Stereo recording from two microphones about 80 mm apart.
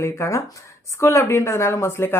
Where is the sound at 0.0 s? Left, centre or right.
Left.